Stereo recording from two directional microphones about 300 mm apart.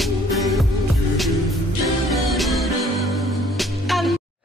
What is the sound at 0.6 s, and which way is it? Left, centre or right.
Music, centre.